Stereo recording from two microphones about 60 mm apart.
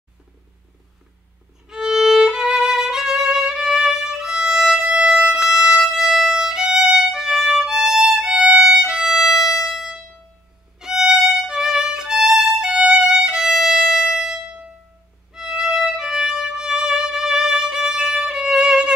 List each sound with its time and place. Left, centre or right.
1.7 s violin: centre
4.7 s violin: centre
5.3 s violin: centre
16.1 s music: centre
18.4 s violin: centre